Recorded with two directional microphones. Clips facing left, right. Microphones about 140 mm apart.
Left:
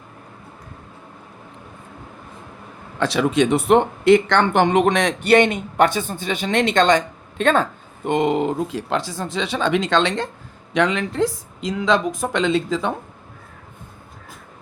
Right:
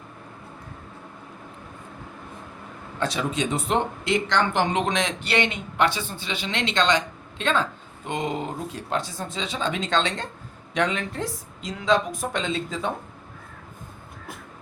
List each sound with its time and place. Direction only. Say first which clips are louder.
3.0 s speech: left 8 dB; 80° left
10.8 s speech: left 6 dB; 90° left